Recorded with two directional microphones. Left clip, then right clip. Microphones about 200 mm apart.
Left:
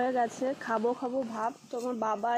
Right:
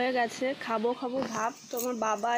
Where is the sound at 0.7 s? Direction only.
15° right (ahead or behind).